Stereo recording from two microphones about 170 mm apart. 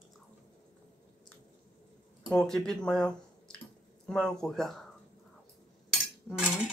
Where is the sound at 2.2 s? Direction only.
5° left (ahead or behind).